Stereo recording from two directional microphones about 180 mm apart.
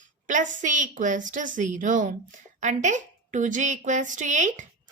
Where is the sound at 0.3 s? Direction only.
45° right (ahead or behind).